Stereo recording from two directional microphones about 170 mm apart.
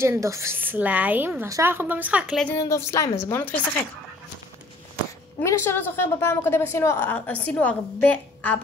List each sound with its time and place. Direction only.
0.0 s a woman's voice: 15° right (ahead or behind); by 2.5 s centre (ahead or behind)
2.6 s a woman's voice: 15° left (ahead or behind)
5.4 s a woman's voice: 15° left (ahead or behind)